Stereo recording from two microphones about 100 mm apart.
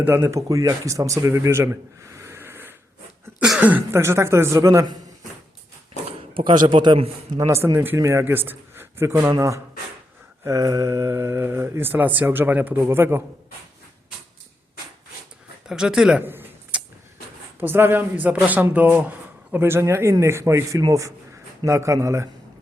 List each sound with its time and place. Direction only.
0.0 s a man's voice: 25° right (ahead or behind)
6.5 s a man's voice: 50° right (ahead or behind)
7.3 s speech: 25° right (ahead or behind)
10.4 s speech: 35° right (ahead or behind)
15.6 s speech: 5° right (ahead or behind)
16.2 s a sound: 20° right (ahead or behind)
17.6 s speech: 20° right (ahead or behind)